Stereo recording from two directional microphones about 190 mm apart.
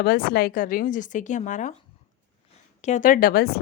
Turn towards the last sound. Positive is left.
turn(degrees=55)  # may be behind; listen again after turning